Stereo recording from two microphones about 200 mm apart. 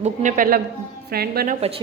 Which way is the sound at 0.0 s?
40° right (ahead or behind).